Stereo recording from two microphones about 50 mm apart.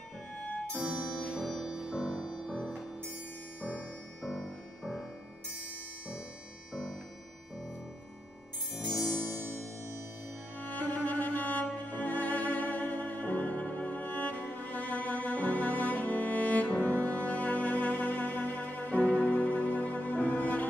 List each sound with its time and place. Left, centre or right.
0.7 s music: centre
1.7 s music: centre
2.0 s music: centre
4.2 s music: centre
6.7 s music: centre
9.3 s music: right
10.6 s music: left